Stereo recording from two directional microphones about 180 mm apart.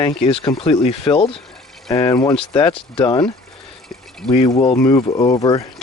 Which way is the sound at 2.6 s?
30° left (ahead or behind).